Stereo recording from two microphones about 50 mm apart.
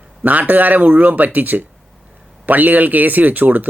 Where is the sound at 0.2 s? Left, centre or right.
Right.